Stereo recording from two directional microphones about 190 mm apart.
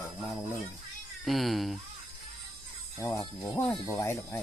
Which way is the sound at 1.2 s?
Centre (ahead or behind).